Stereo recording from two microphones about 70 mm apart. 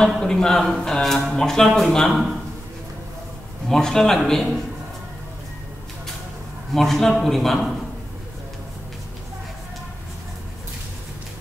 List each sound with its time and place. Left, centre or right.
0.0 s speech: centre
3.6 s a man's voice: centre
6.7 s a man's voice: centre